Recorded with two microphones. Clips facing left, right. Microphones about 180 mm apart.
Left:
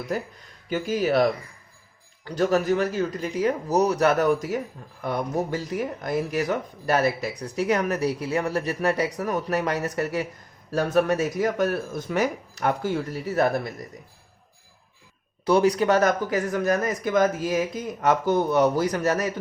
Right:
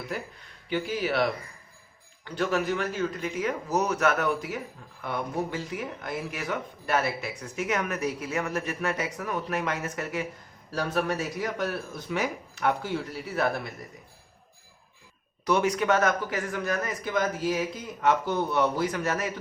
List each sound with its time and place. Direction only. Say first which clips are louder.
0.1 s speech: left 6 dB; 40° left (ahead or behind)
15.4 s speech: left 5 dB; 35° left (ahead or behind)